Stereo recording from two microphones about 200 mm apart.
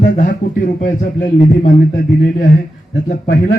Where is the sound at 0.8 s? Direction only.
40° left (ahead or behind).